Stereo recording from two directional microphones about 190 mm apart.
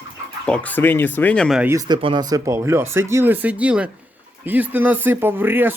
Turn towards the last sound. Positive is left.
turn(degrees=-10)  # may be behind; listen again after turning